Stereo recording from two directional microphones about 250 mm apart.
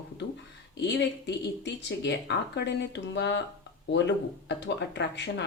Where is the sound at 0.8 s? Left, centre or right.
Left.